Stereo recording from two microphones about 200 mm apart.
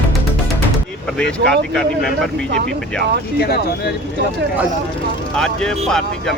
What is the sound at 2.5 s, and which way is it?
Speech, 55° right (ahead or behind).